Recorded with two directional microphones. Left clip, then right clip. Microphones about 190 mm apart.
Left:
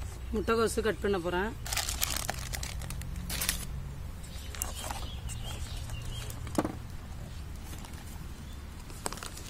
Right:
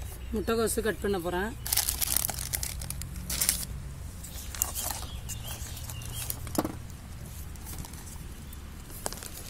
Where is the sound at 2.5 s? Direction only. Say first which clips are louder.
Right 3 dB; 5° left (ahead or behind).